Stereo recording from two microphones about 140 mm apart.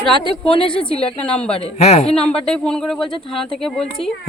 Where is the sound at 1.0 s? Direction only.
5° left (ahead or behind).